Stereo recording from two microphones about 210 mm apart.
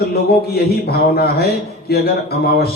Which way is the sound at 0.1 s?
50° left (ahead or behind).